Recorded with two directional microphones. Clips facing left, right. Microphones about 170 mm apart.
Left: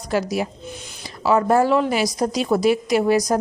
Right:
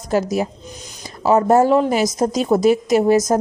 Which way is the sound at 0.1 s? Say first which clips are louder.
Right 3 dB; 45° right (ahead or behind).